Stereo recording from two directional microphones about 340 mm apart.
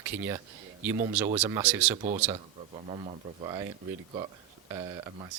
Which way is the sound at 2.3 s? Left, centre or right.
Centre.